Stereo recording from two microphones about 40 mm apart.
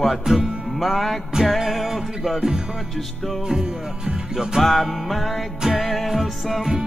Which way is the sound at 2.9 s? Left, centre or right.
Centre.